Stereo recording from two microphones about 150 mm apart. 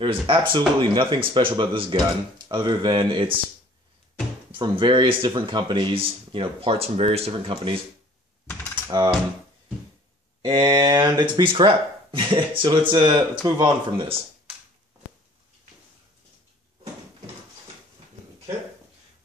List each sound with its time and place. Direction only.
0.0 s speech: 35° right (ahead or behind)
4.5 s speech: 35° right (ahead or behind)
8.8 s mechanisms: 30° right (ahead or behind)
10.4 s speech: 30° right (ahead or behind)